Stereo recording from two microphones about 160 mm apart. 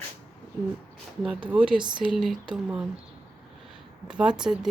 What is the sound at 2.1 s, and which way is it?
Speech, centre (ahead or behind).